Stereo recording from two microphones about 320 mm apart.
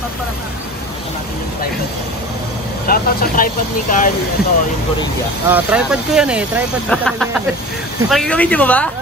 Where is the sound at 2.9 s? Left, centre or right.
Left.